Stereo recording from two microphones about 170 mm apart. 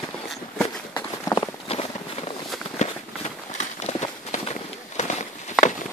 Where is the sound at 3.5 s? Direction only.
40° left (ahead or behind).